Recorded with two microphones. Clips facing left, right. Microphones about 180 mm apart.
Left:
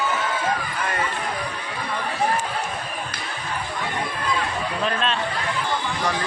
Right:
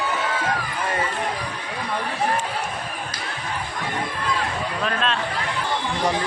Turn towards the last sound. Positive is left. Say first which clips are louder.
# even
turn(degrees=0)  # may be behind; listen again after turning